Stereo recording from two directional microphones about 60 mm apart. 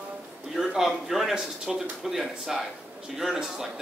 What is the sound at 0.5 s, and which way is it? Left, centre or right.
A man's voice, centre.